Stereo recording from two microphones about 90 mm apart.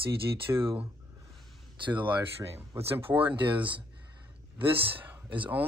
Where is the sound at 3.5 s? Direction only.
65° right (ahead or behind).